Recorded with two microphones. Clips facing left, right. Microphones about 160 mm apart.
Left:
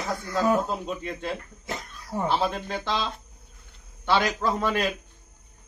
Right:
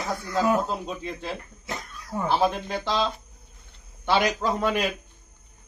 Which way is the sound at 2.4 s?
15° right (ahead or behind).